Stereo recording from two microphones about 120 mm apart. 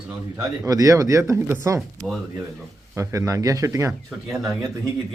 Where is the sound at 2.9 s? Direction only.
25° right (ahead or behind).